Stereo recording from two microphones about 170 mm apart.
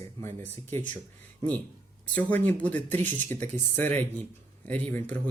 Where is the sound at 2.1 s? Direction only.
10° left (ahead or behind).